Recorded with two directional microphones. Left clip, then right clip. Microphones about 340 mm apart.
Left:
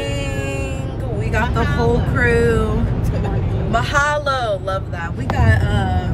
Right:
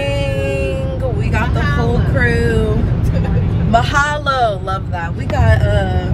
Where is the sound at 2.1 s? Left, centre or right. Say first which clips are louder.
Right 1 dB; centre.